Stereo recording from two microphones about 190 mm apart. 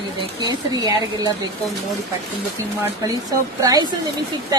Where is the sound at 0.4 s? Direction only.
20° right (ahead or behind).